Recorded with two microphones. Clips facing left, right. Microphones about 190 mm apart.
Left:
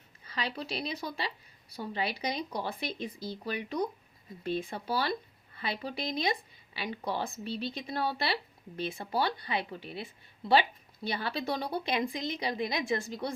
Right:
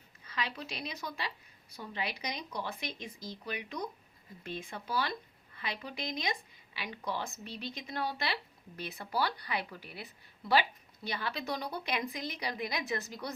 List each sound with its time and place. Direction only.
0.3 s speech: 35° left (ahead or behind)